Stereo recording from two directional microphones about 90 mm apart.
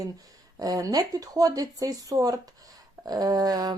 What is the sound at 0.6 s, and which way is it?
A woman's voice, 40° right (ahead or behind).